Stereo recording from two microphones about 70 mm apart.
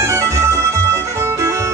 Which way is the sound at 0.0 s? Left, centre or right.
Right.